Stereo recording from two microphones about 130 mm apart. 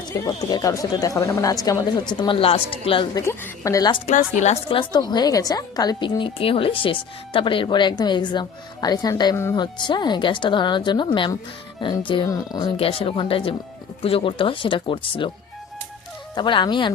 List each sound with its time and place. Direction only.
0.1 s a woman's voice: 30° left (ahead or behind); by 3.1 s 45° left (ahead or behind)
3.2 s speech: 20° left (ahead or behind)
4.0 s a woman's voice: 65° left (ahead or behind)
4.7 s a woman's voice: 35° left (ahead or behind)
9.3 s speech: 20° left (ahead or behind)
9.6 s a woman's voice: 35° left (ahead or behind)
12.2 s speech: 30° left (ahead or behind)
12.7 s a woman's voice: 45° left (ahead or behind)
16.3 s a woman's voice: 35° left (ahead or behind)